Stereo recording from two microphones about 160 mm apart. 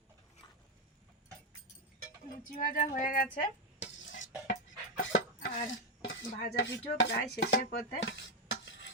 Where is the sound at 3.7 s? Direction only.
50° left (ahead or behind).